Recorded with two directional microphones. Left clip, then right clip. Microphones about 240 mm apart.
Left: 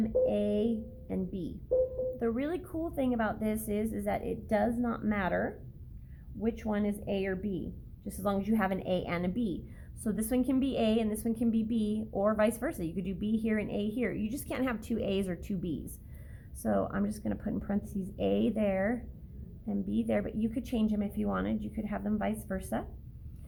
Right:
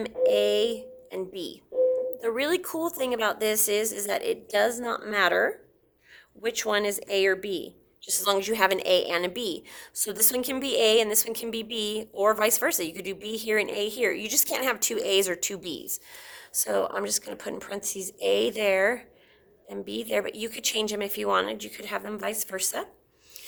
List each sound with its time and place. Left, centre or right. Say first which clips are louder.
0.0 s a woman's voice: right 6 dB; right
2.2 s a woman's voice: right 7 dB; right